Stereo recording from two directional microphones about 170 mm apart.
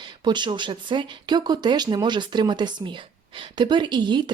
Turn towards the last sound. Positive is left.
turn(degrees=-25)  # may be behind; listen again after turning